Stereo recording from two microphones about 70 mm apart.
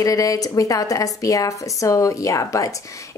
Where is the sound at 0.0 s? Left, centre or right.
Left.